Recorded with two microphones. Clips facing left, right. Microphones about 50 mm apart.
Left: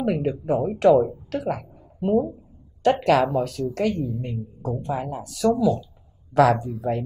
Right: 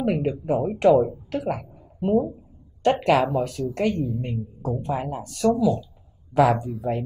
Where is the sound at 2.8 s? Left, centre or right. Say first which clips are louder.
Left 1 dB; right.